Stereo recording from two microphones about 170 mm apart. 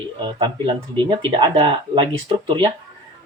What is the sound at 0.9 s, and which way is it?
Speech, 30° right (ahead or behind).